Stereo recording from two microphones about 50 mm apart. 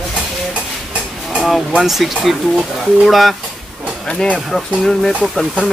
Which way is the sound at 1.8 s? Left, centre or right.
Centre.